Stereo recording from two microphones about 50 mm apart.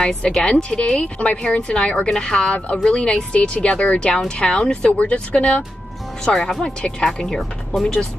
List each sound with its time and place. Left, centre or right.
0.0 s speech: centre